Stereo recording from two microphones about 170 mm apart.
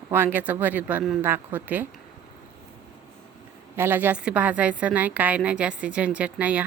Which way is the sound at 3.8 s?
10° right (ahead or behind).